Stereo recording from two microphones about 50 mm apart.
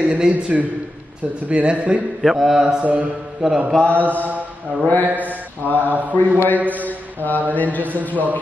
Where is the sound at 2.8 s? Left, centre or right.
Right.